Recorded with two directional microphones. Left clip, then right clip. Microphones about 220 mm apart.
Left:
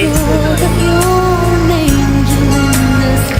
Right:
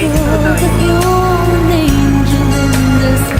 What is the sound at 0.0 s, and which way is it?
Music, centre (ahead or behind).